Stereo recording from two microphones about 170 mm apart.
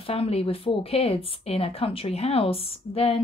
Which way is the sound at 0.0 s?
35° left (ahead or behind).